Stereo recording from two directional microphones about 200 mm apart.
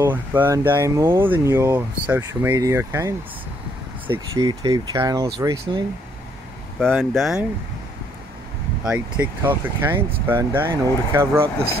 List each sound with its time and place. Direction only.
0.0 s speech: 10° right (ahead or behind)
6.9 s speech: 5° right (ahead or behind)
8.8 s speech: 5° right (ahead or behind)